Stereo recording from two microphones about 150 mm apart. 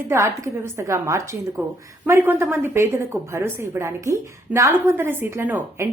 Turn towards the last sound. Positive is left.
turn(degrees=-15)  # may be behind; listen again after turning